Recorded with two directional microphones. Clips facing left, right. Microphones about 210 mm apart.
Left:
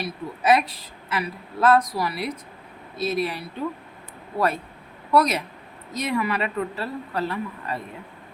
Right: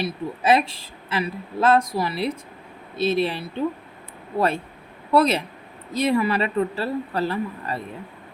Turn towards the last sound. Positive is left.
turn(degrees=-30)  # may be behind; listen again after turning